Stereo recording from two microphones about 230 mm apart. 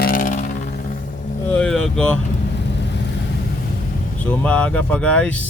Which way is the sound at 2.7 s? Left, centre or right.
Left.